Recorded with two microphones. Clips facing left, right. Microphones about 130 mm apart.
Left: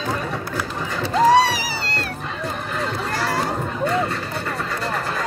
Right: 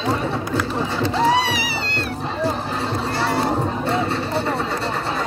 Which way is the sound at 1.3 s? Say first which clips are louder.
Left 4 dB; 40° left (ahead or behind).